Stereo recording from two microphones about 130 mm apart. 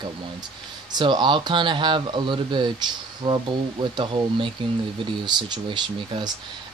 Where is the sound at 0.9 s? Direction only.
35° right (ahead or behind).